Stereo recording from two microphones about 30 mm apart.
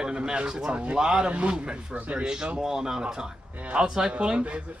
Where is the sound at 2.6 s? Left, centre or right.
Centre.